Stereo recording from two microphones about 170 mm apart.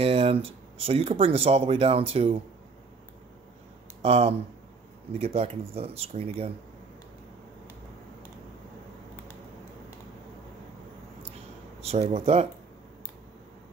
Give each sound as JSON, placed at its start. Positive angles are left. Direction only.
{"t": 0.0, "sound": "speech", "side_deg": -35}
{"t": 4.0, "sound": "speech", "side_deg": -35}
{"t": 11.8, "sound": "speech", "side_deg": -40}